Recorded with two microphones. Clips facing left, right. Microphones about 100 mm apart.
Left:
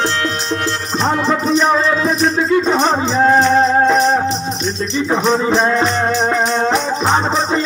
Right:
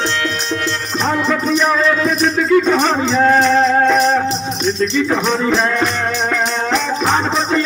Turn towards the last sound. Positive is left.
turn(degrees=20)  # may be behind; listen again after turning